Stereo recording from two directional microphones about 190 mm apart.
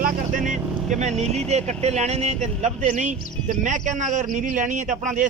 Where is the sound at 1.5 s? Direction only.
35° right (ahead or behind).